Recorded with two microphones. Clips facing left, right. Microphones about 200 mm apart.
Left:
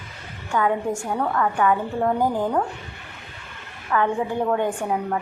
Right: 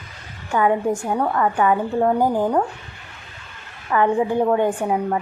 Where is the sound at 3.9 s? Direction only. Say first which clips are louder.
Right 4 dB; 15° right (ahead or behind).